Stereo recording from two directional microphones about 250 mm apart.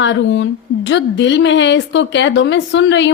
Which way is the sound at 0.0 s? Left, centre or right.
Left.